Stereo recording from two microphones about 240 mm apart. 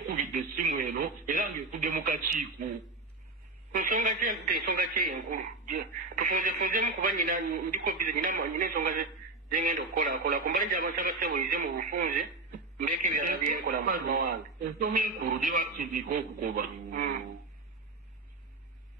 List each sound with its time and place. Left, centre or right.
0.0 s radio: right
3.7 s a man's voice: right